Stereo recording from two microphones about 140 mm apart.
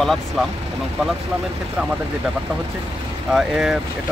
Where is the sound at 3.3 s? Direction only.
5° right (ahead or behind).